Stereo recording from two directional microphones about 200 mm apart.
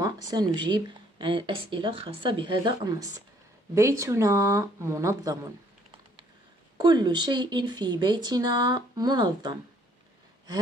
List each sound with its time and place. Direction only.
0.0 s speech: 20° right (ahead or behind)
6.8 s speech: 20° right (ahead or behind)